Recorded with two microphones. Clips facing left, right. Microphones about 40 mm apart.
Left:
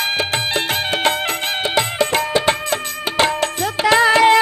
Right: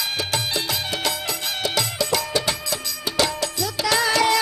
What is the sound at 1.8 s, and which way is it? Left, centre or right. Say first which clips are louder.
Music: left 7 dB; left.